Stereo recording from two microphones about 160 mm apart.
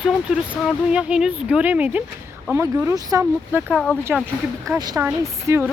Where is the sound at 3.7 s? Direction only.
Centre (ahead or behind).